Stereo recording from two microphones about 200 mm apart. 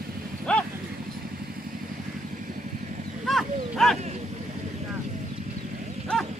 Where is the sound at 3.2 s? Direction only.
Centre (ahead or behind).